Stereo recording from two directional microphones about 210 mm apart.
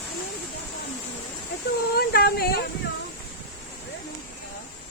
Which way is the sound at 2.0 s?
50° left (ahead or behind).